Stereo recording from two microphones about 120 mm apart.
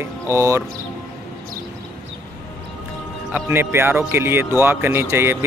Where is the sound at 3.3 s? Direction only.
20° right (ahead or behind).